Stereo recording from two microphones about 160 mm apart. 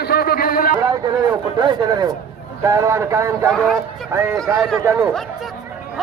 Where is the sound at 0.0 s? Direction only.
75° left (ahead or behind).